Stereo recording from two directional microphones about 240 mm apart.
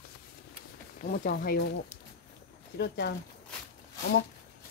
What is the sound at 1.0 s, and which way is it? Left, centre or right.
Speech, left.